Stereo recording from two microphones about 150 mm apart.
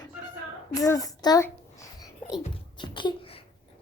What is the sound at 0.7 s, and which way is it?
Music, 25° left (ahead or behind).